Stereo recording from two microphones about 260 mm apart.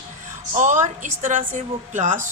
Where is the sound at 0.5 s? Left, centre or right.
Right.